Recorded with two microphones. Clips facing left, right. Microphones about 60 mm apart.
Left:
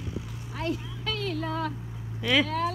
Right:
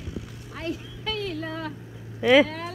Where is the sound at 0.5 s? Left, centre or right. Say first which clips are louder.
Left 1 dB; centre.